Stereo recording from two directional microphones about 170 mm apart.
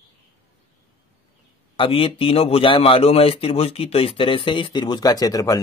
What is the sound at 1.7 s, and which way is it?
A man's voice, 30° left (ahead or behind).